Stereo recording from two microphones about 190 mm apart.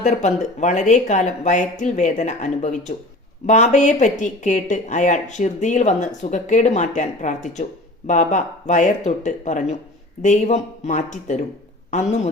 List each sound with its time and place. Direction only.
0.0 s a man's voice: 40° left (ahead or behind)